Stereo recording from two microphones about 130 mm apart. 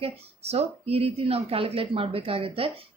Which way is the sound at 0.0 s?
50° right (ahead or behind).